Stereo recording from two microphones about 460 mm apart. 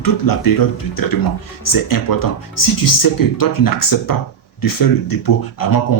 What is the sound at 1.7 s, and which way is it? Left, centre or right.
Speech, left.